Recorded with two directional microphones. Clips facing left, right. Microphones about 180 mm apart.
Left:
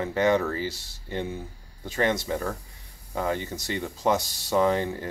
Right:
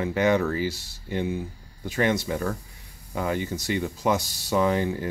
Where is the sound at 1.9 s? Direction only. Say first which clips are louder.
Right 1 dB; 10° right (ahead or behind).